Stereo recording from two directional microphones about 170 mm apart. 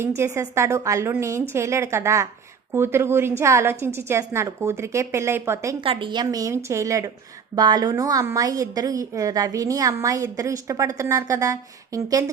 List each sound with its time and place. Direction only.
0.2 s a woman's voice: 15° right (ahead or behind)
5.8 s a woman's voice: 30° right (ahead or behind)